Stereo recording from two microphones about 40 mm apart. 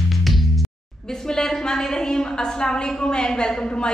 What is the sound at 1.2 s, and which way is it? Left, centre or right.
A woman's voice, centre.